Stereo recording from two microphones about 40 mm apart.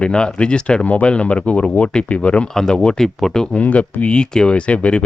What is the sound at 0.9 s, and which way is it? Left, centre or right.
Speech, left.